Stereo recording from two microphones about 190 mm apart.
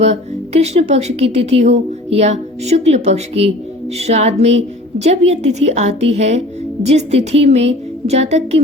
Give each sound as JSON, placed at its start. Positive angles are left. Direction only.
{"t": 0.0, "sound": "a woman's voice", "side_deg": -35}